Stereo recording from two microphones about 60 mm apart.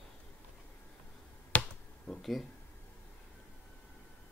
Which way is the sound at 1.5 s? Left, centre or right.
Left.